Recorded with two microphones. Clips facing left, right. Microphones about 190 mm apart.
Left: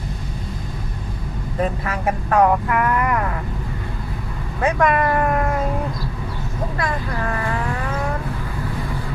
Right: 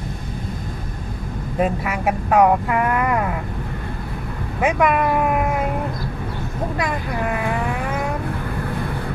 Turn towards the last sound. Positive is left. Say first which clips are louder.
# right 1 dB
turn(degrees=-15)  # may be behind; listen again after turning